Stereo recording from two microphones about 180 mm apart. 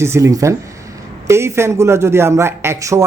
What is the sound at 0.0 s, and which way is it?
Speech, 15° right (ahead or behind).